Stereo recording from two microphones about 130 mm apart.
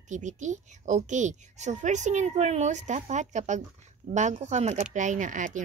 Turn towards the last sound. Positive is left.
turn(degrees=-80)